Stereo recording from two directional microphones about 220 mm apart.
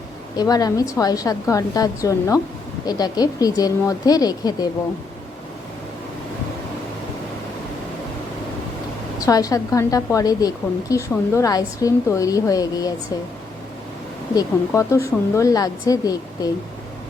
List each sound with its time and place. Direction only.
0.3 s a woman's voice: 15° left (ahead or behind)
9.1 s a woman's voice: 15° left (ahead or behind)
14.3 s a woman's voice: 10° left (ahead or behind)